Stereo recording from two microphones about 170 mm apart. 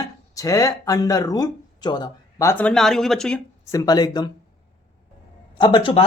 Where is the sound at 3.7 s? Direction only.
20° left (ahead or behind).